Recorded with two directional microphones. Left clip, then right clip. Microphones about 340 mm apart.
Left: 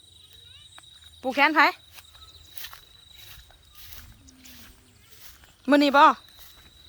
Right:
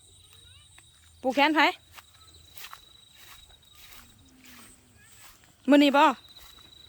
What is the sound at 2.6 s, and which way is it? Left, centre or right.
Cricket, centre.